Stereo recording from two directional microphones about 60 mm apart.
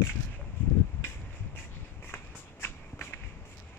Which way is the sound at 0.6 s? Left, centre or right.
Left.